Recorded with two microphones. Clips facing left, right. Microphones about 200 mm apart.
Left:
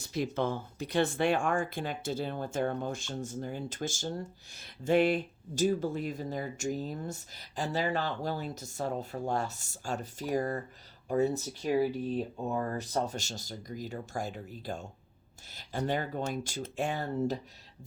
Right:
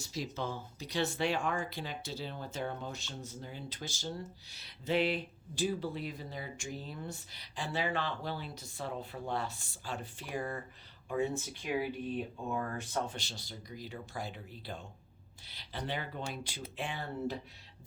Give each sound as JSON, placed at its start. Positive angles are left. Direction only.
{"t": 0.0, "sound": "speech", "side_deg": 55}
{"t": 15.4, "sound": "a sound", "side_deg": 45}
{"t": 15.9, "sound": "speech", "side_deg": 45}